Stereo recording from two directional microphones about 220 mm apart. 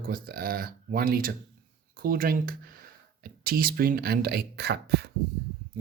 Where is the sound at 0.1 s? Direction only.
40° right (ahead or behind).